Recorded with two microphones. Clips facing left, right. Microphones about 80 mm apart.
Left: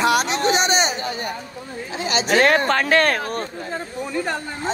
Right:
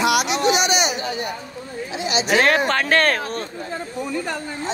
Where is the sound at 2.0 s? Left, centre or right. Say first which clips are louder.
Left 1 dB; left.